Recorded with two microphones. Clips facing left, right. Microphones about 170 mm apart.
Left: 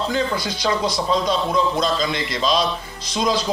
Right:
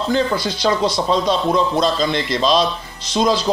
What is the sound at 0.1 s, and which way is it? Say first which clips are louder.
A man's voice: right 4 dB; 30° right (ahead or behind).